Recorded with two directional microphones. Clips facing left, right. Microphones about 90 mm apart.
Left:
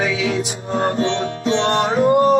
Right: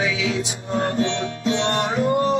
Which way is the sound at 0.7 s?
40° left (ahead or behind).